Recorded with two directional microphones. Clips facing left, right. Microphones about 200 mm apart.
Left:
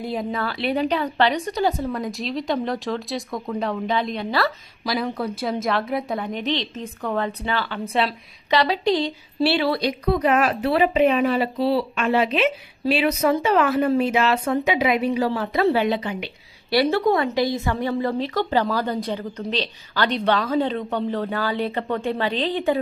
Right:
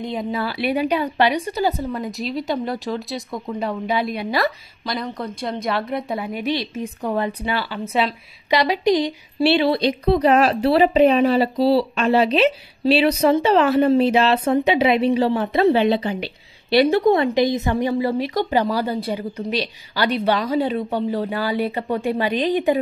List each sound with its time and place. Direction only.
0.0 s a woman's voice: 5° left (ahead or behind)
0.3 s a woman's voice: 10° right (ahead or behind)
4.8 s a woman's voice: 5° left (ahead or behind); by 16.3 s 35° right (ahead or behind)
16.8 s a woman's voice: 20° right (ahead or behind)